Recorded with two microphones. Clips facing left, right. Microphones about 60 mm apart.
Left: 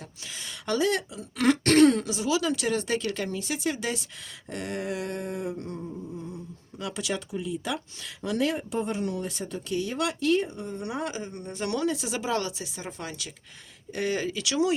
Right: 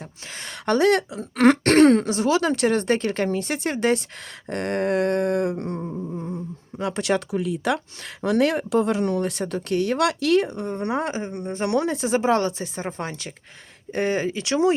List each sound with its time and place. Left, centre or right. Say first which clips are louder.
0.3 s speech: right 6 dB; right
5.9 s speech: right 7 dB; right
7.0 s speech: right 9 dB; right